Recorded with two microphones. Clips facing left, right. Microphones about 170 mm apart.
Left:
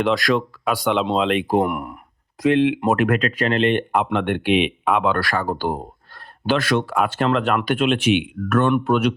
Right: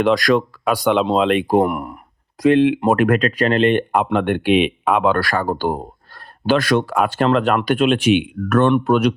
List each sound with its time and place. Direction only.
0.0 s speech: 45° right (ahead or behind)